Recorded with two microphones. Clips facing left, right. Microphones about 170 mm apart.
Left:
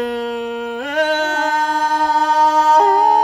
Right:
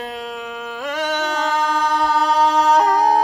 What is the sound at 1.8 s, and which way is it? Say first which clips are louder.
Chant: left 2 dB; 40° left (ahead or behind).